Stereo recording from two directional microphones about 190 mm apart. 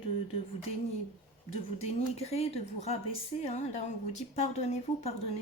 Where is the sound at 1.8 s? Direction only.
30° left (ahead or behind).